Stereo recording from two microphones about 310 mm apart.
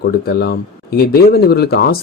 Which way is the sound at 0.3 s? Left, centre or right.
Left.